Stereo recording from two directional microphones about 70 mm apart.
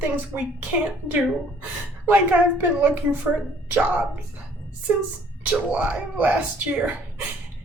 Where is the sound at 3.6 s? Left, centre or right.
Centre.